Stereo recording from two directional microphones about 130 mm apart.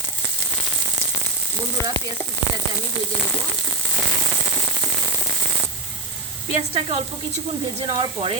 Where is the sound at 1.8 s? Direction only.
20° left (ahead or behind).